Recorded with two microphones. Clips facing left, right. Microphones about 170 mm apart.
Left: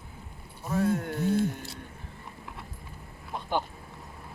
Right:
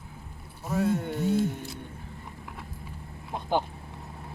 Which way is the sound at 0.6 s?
5° right (ahead or behind).